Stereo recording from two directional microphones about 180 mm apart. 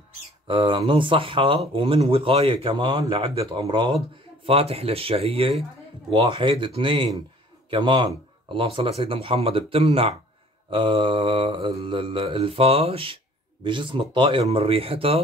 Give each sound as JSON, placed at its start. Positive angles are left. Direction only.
{"t": 0.5, "sound": "mantra", "side_deg": -25}
{"t": 4.5, "sound": "speech", "side_deg": -30}
{"t": 6.0, "sound": "mantra", "side_deg": -30}